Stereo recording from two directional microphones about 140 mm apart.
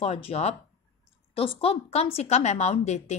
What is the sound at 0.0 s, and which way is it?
A woman's voice, 45° left (ahead or behind).